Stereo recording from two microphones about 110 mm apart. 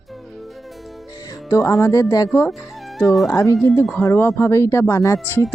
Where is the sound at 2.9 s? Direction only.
Centre (ahead or behind).